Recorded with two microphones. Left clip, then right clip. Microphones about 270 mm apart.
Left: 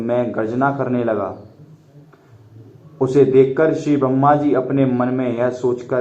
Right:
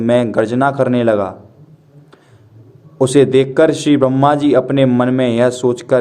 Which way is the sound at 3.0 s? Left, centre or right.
Right.